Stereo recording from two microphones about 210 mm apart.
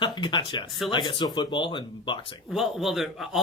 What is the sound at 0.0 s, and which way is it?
Speech, 20° left (ahead or behind).